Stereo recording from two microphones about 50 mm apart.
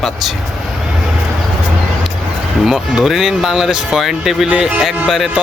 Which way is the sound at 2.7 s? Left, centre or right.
Centre.